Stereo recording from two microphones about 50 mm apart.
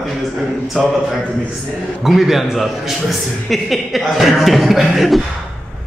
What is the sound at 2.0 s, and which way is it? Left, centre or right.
A man's voice, centre.